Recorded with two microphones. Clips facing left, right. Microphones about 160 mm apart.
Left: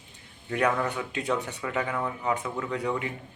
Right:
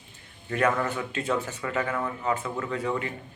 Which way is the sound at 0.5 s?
15° left (ahead or behind).